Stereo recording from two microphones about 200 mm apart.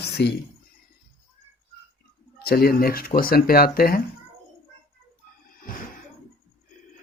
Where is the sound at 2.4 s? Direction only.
50° left (ahead or behind).